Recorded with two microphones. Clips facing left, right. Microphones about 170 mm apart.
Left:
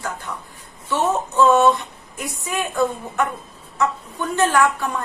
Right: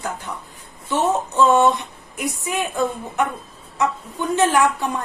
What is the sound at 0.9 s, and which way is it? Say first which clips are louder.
A woman's voice: right 1 dB; 20° right (ahead or behind).